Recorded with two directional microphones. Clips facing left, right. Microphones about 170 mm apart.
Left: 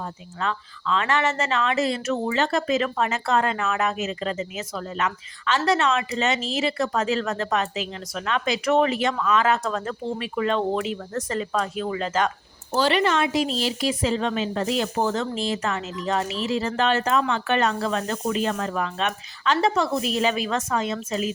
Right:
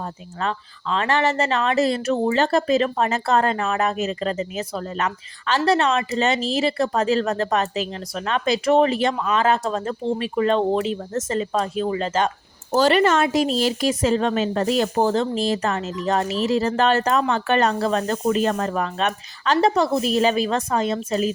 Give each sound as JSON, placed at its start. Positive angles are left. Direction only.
{"t": 0.0, "sound": "speech", "side_deg": -40}
{"t": 12.7, "sound": "speech", "side_deg": -45}